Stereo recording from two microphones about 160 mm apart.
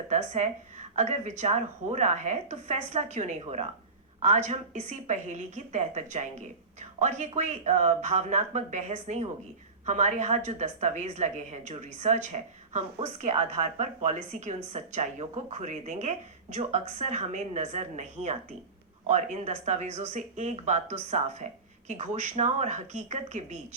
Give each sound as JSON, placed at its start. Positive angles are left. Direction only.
{"t": 0.1, "sound": "speech", "side_deg": -45}